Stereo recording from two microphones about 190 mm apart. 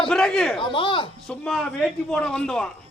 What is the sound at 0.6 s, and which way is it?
Speech, 25° left (ahead or behind).